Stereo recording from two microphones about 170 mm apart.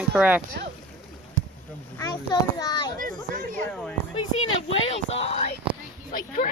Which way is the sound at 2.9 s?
50° right (ahead or behind).